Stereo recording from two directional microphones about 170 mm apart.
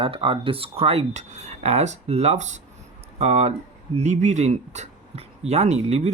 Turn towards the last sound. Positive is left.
turn(degrees=-40)  # may be behind; listen again after turning